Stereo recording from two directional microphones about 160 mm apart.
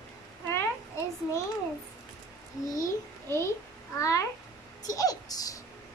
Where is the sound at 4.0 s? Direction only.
20° left (ahead or behind).